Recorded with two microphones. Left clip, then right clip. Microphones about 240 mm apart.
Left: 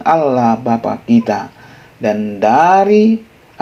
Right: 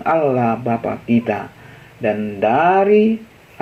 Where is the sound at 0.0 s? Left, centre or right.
Left.